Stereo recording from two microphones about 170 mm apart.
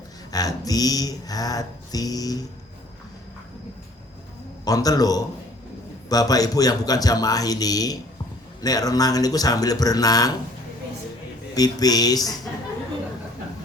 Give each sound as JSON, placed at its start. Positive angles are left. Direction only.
{"t": 0.3, "sound": "music", "side_deg": 20}
{"t": 4.6, "sound": "music", "side_deg": 20}
{"t": 11.5, "sound": "music", "side_deg": 20}